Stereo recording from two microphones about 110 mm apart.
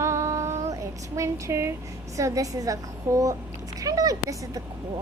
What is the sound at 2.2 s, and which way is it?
Child singing, 30° right (ahead or behind).